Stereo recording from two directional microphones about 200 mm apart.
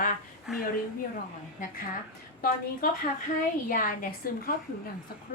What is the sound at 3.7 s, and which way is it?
Speech, 45° left (ahead or behind).